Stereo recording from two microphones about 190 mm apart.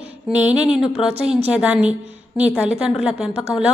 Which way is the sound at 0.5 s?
5° right (ahead or behind).